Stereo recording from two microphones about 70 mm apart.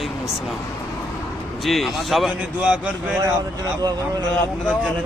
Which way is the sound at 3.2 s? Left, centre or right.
Right.